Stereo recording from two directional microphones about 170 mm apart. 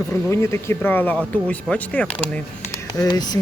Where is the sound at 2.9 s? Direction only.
20° left (ahead or behind).